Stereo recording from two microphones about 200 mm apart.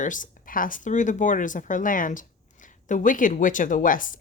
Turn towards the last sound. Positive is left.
turn(degrees=40)  # may be behind; listen again after turning